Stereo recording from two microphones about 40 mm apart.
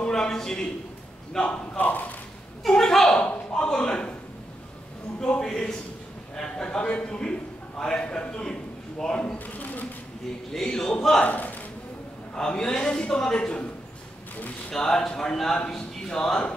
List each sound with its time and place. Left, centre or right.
0.0 s a sound: centre
1.4 s speech: left
2.7 s speech: centre
3.1 s a man's voice: left
5.4 s a man's voice: centre
9.6 s speech: left
10.5 s speech: centre
11.2 s a man's voice: left
12.4 s a man's voice: centre
14.7 s a man's voice: centre